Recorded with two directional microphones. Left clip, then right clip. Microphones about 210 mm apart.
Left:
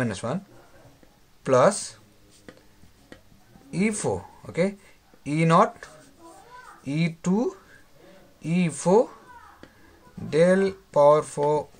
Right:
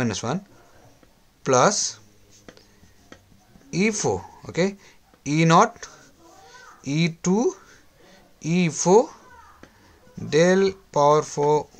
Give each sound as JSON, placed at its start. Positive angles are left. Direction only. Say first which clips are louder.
{"t": 0.0, "sound": "speech", "louder": "right 2 dB", "side_deg": -30}
{"t": 1.4, "sound": "speech", "louder": "right 1 dB", "side_deg": -25}
{"t": 3.7, "sound": "speech", "louder": "right 4 dB", "side_deg": -25}
{"t": 10.3, "sound": "speech", "louder": "right 2 dB", "side_deg": -25}